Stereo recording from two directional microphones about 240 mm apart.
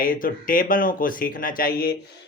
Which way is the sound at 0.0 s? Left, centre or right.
Left.